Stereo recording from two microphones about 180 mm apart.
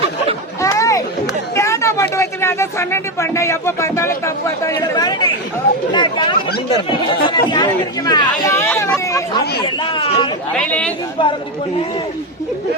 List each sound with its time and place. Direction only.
0.6 s a sound: 15° left (ahead or behind)
1.5 s speech: 15° left (ahead or behind)
6.5 s speech: 60° left (ahead or behind)
7.3 s speech: 25° left (ahead or behind)
10.5 s speech: 5° left (ahead or behind)
11.2 s speech: 25° left (ahead or behind)